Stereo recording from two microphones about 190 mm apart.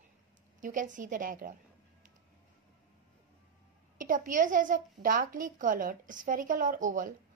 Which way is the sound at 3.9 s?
45° right (ahead or behind).